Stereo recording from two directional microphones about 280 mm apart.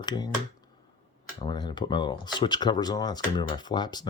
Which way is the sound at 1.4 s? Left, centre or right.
Centre.